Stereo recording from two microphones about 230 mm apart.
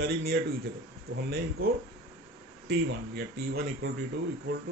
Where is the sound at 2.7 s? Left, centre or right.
Right.